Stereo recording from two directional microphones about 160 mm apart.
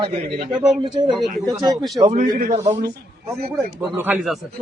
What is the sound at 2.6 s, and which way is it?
Speech, 20° right (ahead or behind).